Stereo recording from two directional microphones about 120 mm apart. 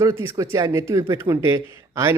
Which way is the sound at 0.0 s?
20° right (ahead or behind).